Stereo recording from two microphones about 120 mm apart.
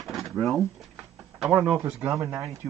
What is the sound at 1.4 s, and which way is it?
Speech, 10° right (ahead or behind).